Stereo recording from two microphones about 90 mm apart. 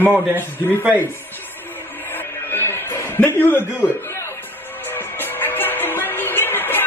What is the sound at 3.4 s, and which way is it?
Speech, 25° left (ahead or behind).